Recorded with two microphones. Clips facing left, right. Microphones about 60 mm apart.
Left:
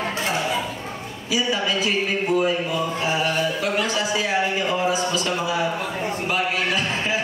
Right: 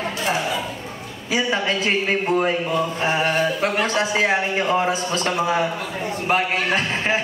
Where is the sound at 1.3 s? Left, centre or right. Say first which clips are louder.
Right 1 dB; right.